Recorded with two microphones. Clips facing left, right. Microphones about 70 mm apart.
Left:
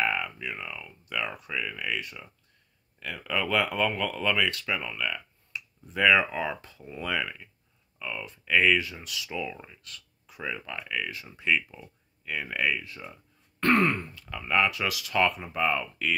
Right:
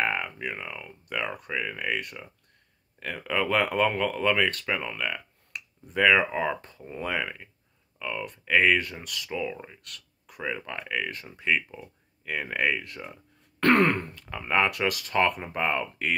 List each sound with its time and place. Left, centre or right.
0.0 s speech: right
6.0 s speech: right
6.9 s speech: right
8.0 s speech: right
9.8 s a sound: right
10.6 s speech: right
11.3 s speech: right
13.6 s throat clearing: right
14.1 s speech: right
14.7 s speech: right